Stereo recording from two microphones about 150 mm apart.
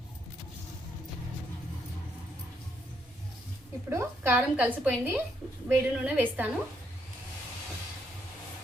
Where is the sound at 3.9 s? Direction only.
15° right (ahead or behind).